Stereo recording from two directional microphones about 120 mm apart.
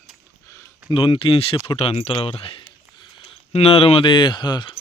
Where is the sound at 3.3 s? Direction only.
55° left (ahead or behind); by 4.8 s 40° left (ahead or behind).